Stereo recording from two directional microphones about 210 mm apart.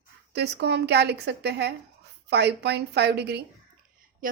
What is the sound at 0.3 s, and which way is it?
A woman's voice, 50° right (ahead or behind).